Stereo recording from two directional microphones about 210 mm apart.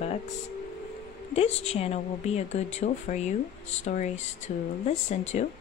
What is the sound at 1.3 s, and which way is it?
A woman's voice, 30° left (ahead or behind).